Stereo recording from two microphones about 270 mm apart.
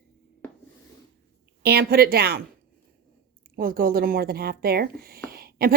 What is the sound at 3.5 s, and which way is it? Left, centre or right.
A woman's voice, right.